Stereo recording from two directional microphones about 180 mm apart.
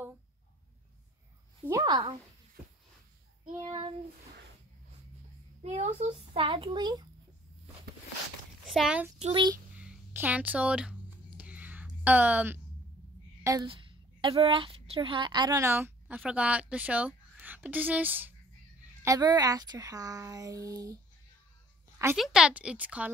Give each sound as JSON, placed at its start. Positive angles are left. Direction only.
{"t": 1.7, "sound": "a sound", "side_deg": -20}
{"t": 5.6, "sound": "a child's voice", "side_deg": -40}
{"t": 8.6, "sound": "a child's voice", "side_deg": -5}
{"t": 9.2, "sound": "a child's voice", "side_deg": -25}
{"t": 9.8, "sound": "a sound", "side_deg": -10}
{"t": 13.7, "sound": "a woman's voice", "side_deg": -30}
{"t": 19.0, "sound": "a child's voice", "side_deg": -20}
{"t": 22.1, "sound": "speech", "side_deg": 0}